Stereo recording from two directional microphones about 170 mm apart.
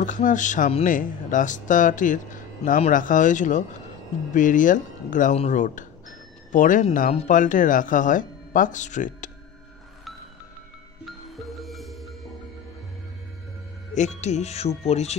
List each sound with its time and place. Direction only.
0.0 s speech: 50° left (ahead or behind)
11.1 s music: centre (ahead or behind)
13.9 s speech: 45° left (ahead or behind)